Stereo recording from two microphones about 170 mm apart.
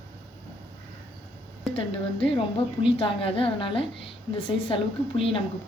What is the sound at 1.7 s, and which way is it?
A woman's voice, 30° left (ahead or behind).